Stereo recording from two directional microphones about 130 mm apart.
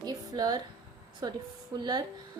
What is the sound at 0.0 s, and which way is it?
Music, 30° right (ahead or behind).